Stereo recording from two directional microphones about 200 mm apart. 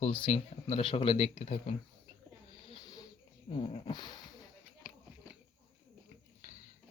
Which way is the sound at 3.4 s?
25° left (ahead or behind).